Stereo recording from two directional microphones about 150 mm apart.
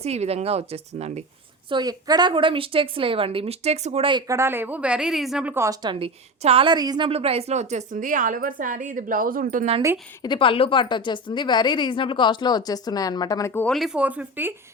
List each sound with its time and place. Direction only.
0.0 s speech: 45° right (ahead or behind)
1.7 s a woman's voice: 25° right (ahead or behind); by 4.1 s 45° right (ahead or behind)
4.1 s a woman's voice: 20° right (ahead or behind)
5.6 s a woman's voice: 30° right (ahead or behind)
7.1 s a woman's voice: 40° right (ahead or behind); by 9.6 s 65° right (ahead or behind)
10.2 s a woman's voice: 35° left (ahead or behind); by 13.7 s 15° left (ahead or behind)
13.7 s a woman's voice: 5° right (ahead or behind)